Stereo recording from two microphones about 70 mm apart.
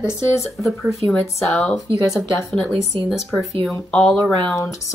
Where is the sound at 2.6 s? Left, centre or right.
Centre.